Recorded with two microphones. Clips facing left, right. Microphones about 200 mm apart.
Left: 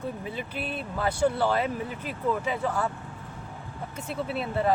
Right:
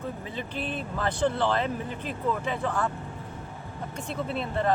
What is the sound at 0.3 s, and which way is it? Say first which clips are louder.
Speech: right 1 dB; 10° left (ahead or behind).